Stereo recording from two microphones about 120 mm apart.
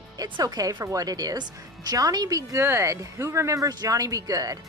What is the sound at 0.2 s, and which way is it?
A woman's voice, 30° right (ahead or behind).